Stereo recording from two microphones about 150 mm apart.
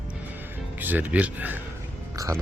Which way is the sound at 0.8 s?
10° right (ahead or behind).